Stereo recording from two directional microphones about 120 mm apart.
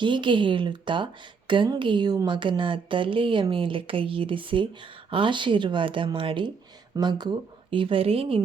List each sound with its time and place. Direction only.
0.0 s a woman's voice: 40° right (ahead or behind)